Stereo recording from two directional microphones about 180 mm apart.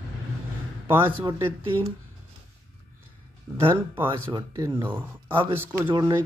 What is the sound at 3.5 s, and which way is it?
Speech, 10° right (ahead or behind).